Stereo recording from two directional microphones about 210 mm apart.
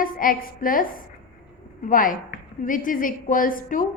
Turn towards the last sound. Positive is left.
turn(degrees=40)  # may be behind; listen again after turning